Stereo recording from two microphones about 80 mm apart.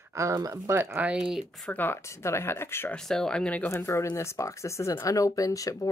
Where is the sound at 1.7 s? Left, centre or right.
Left.